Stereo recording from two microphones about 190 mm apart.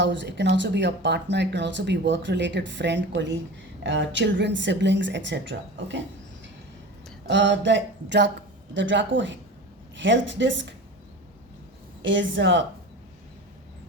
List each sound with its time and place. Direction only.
0.0 s speech: 70° right (ahead or behind)
7.3 s speech: 70° right (ahead or behind)
12.0 s speech: 75° right (ahead or behind)